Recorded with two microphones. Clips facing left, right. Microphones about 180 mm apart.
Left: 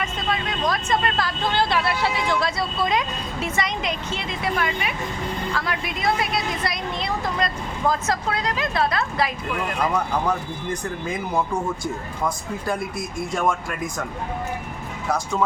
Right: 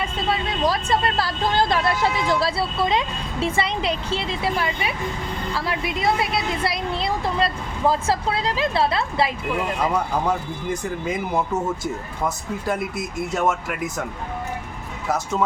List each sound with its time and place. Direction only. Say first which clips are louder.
0.0 s vehicle: right 2 dB; 30° right (ahead or behind)
0.7 s a woman's voice: right 1 dB; 35° right (ahead or behind)
9.9 s speech: right 1 dB; 10° right (ahead or behind)
15.1 s speech: even; 5° right (ahead or behind)